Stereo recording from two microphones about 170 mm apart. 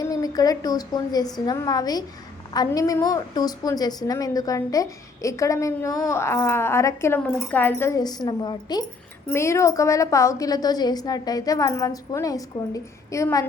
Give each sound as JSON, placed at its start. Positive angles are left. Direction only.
{"t": 0.0, "sound": "a woman's voice", "side_deg": 20}
{"t": 9.2, "sound": "a woman's voice", "side_deg": 15}